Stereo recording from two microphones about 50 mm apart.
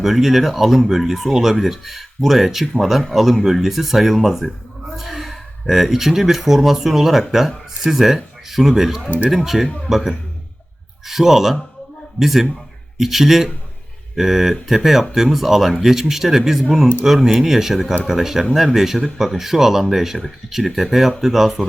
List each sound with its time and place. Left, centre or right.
0.0 s speech: centre
9.0 s speech: right
9.3 s speech: centre